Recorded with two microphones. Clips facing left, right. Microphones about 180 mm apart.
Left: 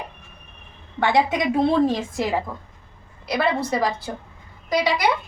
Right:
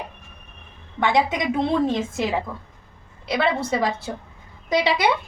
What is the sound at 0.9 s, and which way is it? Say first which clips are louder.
A woman's voice: left 1 dB; 20° right (ahead or behind).